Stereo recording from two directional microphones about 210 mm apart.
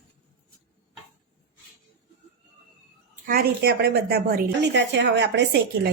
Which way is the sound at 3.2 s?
45° right (ahead or behind).